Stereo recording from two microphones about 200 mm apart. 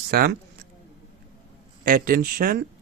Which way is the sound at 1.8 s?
45° right (ahead or behind).